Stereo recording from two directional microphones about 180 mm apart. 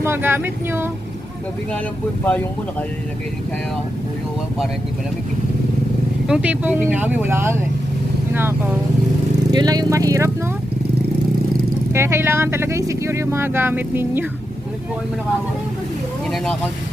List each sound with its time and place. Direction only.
0.0 s speech: 15° right (ahead or behind)
2.2 s speech: 10° left (ahead or behind)
6.2 s speech: 5° right (ahead or behind)
11.9 s speech: 15° right (ahead or behind)